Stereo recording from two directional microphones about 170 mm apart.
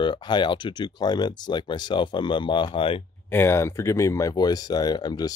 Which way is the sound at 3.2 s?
15° left (ahead or behind).